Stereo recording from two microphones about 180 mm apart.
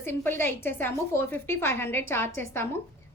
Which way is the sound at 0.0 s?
10° left (ahead or behind).